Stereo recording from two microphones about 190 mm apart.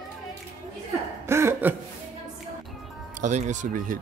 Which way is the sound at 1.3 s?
15° right (ahead or behind).